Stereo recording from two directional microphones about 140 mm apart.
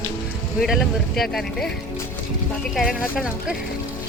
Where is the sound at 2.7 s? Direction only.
Centre (ahead or behind).